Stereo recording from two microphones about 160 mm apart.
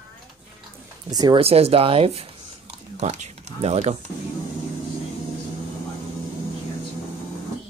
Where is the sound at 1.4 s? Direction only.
40° right (ahead or behind).